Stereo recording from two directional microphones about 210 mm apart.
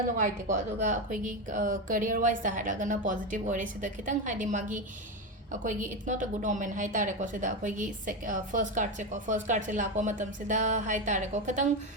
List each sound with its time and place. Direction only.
0.2 s a woman's voice: 35° right (ahead or behind)